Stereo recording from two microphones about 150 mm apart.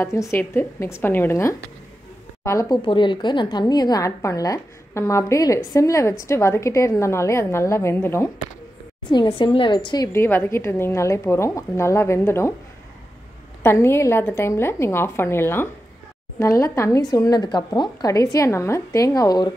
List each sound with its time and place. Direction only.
0.0 s a woman's voice: 20° left (ahead or behind)
2.8 s a woman's voice: 35° left (ahead or behind); by 8.3 s 15° left (ahead or behind)
9.1 s a woman's voice: 35° left (ahead or behind)
10.1 s a woman's voice: 15° left (ahead or behind)
13.6 s a woman's voice: 15° left (ahead or behind)